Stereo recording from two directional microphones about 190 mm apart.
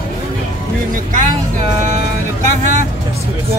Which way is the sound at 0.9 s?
45° right (ahead or behind).